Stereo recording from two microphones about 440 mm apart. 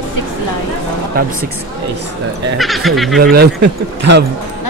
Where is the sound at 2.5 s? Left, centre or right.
Centre.